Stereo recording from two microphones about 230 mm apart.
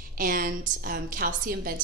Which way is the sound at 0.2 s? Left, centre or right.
Right.